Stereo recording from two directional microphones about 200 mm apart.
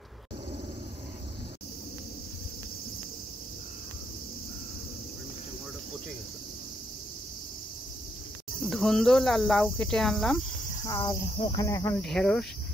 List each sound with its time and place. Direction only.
8.6 s cricket: centre (ahead or behind)
10.8 s speech: 20° left (ahead or behind)
12.0 s cricket: 5° left (ahead or behind)